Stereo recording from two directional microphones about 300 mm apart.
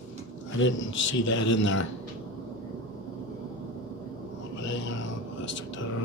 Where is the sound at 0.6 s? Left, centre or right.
Left.